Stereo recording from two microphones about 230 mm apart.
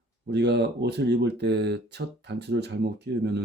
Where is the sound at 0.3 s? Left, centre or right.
Right.